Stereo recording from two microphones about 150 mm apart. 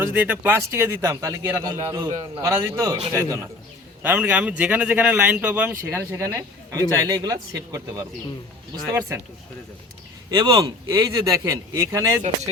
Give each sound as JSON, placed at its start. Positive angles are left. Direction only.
{"t": 0.0, "sound": "a man's voice", "side_deg": -10}
{"t": 2.5, "sound": "speech", "side_deg": -20}
{"t": 4.0, "sound": "a man's voice", "side_deg": -10}
{"t": 10.3, "sound": "a man's voice", "side_deg": -25}